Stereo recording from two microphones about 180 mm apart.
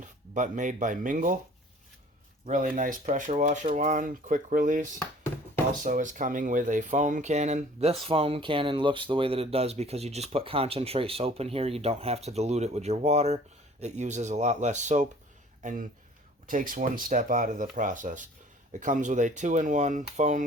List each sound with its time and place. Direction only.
0.0 s speech: 45° right (ahead or behind)
2.5 s speech: 45° right (ahead or behind)